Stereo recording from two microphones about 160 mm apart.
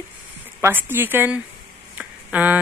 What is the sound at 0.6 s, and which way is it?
Speech, 15° right (ahead or behind).